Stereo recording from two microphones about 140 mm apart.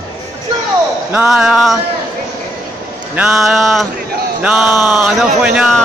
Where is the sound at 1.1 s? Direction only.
5° right (ahead or behind).